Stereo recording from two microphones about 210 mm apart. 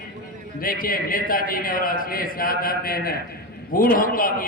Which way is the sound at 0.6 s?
45° left (ahead or behind).